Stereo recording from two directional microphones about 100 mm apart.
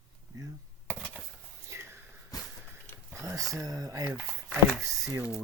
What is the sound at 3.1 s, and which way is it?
Speech, 30° right (ahead or behind).